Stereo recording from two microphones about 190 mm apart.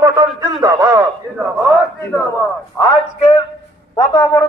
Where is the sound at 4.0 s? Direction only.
20° left (ahead or behind).